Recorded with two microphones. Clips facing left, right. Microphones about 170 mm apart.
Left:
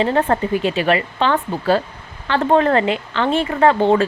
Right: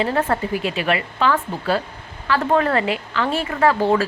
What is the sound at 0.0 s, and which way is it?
Speech, 30° left (ahead or behind).